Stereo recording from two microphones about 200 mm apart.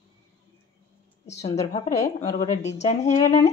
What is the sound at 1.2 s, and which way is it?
A woman's voice, 35° left (ahead or behind).